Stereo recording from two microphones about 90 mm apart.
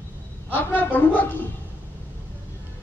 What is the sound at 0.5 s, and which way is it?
Speech, 20° left (ahead or behind).